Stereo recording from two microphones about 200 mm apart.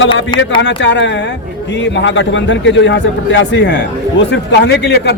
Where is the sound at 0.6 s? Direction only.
65° left (ahead or behind).